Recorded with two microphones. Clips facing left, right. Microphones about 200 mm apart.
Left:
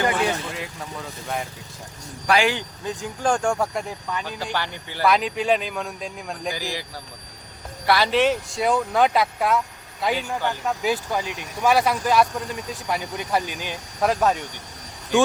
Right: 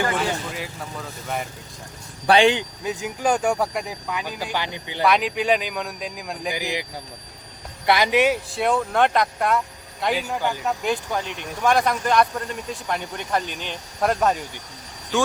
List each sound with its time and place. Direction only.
0.0 s vehicle: 15° left (ahead or behind)
0.5 s speech: centre (ahead or behind)
2.2 s speech: 30° right (ahead or behind)
3.0 s speech: 5° right (ahead or behind)
5.0 s speech: centre (ahead or behind)
6.5 s speech: 20° right (ahead or behind)
7.9 s speech: 15° right (ahead or behind)
8.5 s speech: centre (ahead or behind)
10.8 s speech: 5° left (ahead or behind)